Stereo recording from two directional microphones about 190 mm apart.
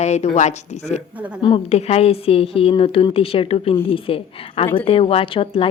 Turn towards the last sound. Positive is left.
turn(degrees=30)  # may be behind; listen again after turning